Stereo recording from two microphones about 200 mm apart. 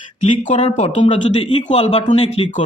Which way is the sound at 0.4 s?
30° left (ahead or behind).